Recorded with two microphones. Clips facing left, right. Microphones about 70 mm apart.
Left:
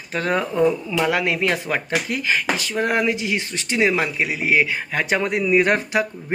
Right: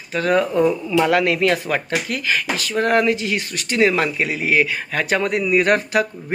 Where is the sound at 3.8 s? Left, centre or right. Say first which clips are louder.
Right 2 dB; centre.